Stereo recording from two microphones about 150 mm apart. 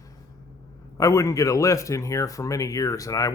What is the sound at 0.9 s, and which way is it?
Speech, 20° left (ahead or behind).